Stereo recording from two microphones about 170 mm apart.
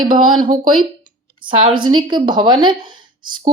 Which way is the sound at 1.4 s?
30° right (ahead or behind).